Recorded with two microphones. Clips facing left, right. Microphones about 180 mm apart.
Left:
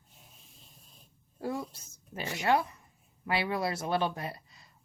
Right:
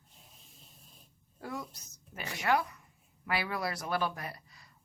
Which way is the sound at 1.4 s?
30° left (ahead or behind).